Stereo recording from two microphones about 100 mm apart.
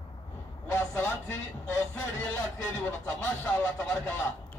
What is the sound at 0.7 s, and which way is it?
Speech, 25° left (ahead or behind).